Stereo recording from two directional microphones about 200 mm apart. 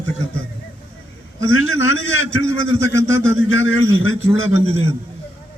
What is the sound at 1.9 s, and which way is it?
Speech, 80° left.